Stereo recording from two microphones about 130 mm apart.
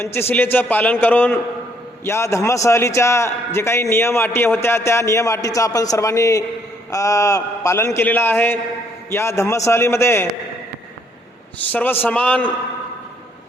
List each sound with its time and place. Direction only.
0.0 s a man's voice: 20° left (ahead or behind)
11.7 s a man's voice: 15° left (ahead or behind)